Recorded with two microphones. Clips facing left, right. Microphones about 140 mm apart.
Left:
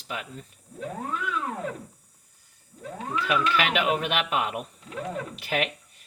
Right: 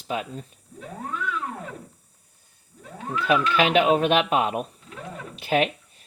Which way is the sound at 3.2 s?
30° right (ahead or behind).